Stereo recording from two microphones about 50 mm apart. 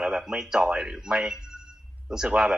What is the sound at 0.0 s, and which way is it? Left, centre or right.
Speech, centre.